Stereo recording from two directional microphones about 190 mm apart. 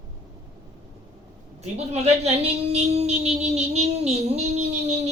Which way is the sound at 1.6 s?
35° right (ahead or behind).